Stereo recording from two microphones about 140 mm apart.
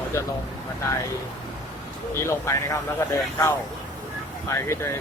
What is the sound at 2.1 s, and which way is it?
Speech, 20° left (ahead or behind).